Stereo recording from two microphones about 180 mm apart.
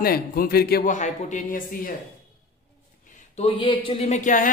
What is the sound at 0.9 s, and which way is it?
A man's voice, 45° left (ahead or behind).